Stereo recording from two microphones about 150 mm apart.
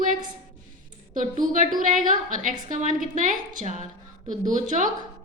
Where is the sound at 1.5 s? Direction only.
60° right (ahead or behind).